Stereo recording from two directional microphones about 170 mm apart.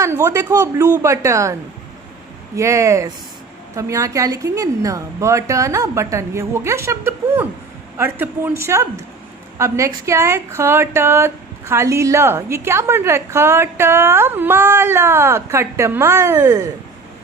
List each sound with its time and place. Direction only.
0.0 s a woman's voice: 15° right (ahead or behind)
2.6 s a woman's voice: 20° right (ahead or behind)